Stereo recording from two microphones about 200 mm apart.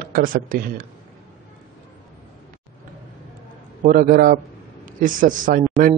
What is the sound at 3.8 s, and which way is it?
A man's voice, 45° right (ahead or behind).